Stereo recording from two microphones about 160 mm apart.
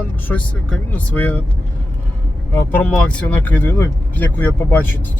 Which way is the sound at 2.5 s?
10° left (ahead or behind).